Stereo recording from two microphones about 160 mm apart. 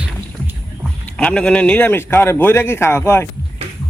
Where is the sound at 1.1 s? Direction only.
5° left (ahead or behind).